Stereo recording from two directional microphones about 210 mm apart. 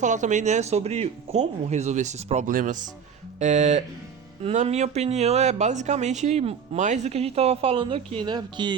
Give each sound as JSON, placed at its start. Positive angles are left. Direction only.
{"t": 0.0, "sound": "speech", "side_deg": -35}